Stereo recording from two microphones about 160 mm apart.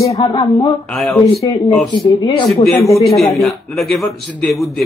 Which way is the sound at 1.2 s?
20° left (ahead or behind).